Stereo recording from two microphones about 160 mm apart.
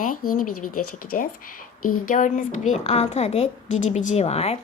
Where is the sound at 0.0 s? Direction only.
60° left (ahead or behind).